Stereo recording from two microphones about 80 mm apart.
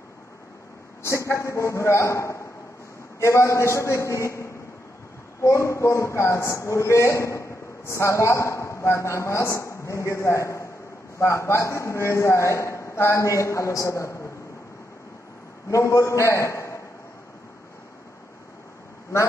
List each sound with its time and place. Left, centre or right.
1.0 s a man's voice: left
15.7 s a man's voice: left